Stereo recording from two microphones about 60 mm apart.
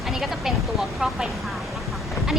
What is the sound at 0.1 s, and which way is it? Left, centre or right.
Speech, centre.